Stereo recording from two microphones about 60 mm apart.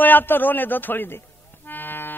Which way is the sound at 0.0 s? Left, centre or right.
Left.